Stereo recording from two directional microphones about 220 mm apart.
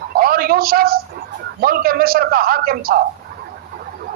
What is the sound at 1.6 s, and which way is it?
A man's voice, 45° right (ahead or behind).